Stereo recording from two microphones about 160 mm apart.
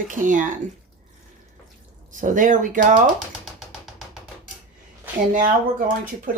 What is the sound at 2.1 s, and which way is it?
Speech, 55° right (ahead or behind).